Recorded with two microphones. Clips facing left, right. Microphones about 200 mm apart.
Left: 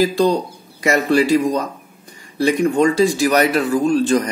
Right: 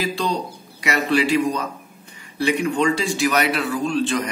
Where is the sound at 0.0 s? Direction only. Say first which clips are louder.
Left 8 dB; 45° left (ahead or behind).